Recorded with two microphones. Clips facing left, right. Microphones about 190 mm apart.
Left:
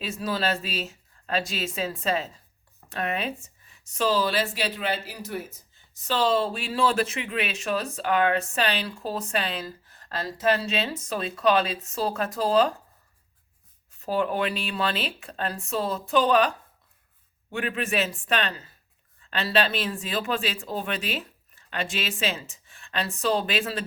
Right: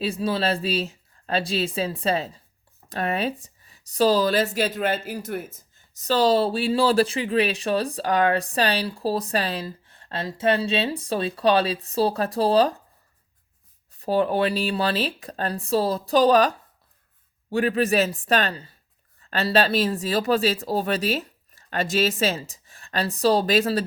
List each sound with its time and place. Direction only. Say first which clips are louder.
0.0 s speech: right 4 dB; 30° right (ahead or behind); by 5.5 s 50° right (ahead or behind)
5.5 s speech: right 1 dB; 40° right (ahead or behind)
14.0 s speech: right 4 dB; 35° right (ahead or behind)
17.5 s speech: right 7 dB; 35° right (ahead or behind)